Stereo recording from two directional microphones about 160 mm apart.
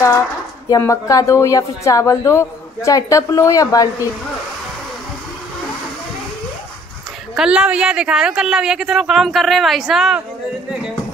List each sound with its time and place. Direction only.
0.7 s a woman's voice: 20° left (ahead or behind)
7.3 s speech: 5° right (ahead or behind)